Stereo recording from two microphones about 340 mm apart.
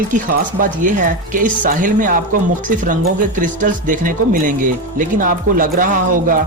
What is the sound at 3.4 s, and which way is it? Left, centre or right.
Speech, right.